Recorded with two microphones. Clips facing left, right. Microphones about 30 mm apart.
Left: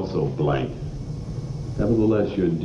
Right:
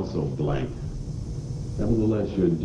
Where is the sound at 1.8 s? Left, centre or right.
Left.